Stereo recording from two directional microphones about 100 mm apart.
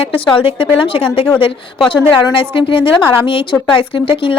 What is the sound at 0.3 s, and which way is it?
A woman's voice, 65° left (ahead or behind).